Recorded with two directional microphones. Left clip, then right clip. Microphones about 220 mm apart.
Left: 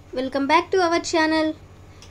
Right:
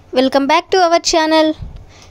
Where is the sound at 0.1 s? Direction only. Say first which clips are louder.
Right 8 dB; 40° right (ahead or behind).